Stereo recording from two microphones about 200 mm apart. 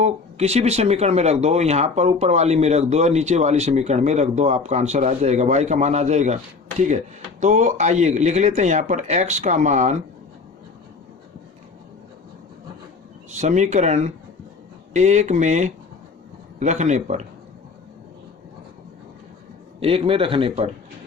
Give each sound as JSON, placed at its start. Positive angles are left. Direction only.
{"t": 0.0, "sound": "speech", "side_deg": -35}
{"t": 13.4, "sound": "speech", "side_deg": -35}
{"t": 19.8, "sound": "speech", "side_deg": -30}